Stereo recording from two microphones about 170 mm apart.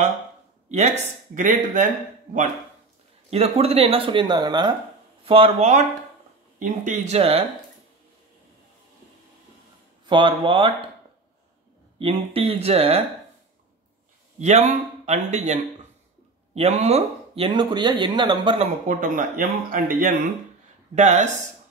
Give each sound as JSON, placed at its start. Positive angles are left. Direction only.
{"t": 0.7, "sound": "speech", "side_deg": -40}
{"t": 3.3, "sound": "speech", "side_deg": -35}
{"t": 10.0, "sound": "speech", "side_deg": -30}
{"t": 12.0, "sound": "speech", "side_deg": -35}
{"t": 14.4, "sound": "speech", "side_deg": -40}
{"t": 18.9, "sound": "speech", "side_deg": -50}
{"t": 20.9, "sound": "speech", "side_deg": -45}